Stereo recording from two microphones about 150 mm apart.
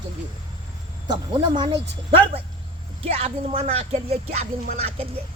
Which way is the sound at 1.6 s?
35° right (ahead or behind).